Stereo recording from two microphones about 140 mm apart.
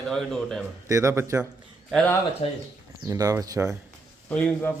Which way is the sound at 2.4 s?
45° left (ahead or behind).